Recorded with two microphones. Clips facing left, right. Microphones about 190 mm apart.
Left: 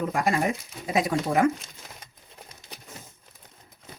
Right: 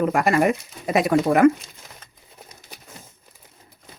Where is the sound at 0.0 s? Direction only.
65° right (ahead or behind).